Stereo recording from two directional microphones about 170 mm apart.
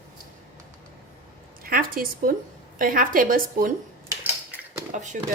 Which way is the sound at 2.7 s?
55° right (ahead or behind).